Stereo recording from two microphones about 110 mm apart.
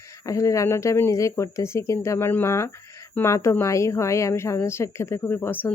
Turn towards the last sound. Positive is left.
turn(degrees=20)  # may be behind; listen again after turning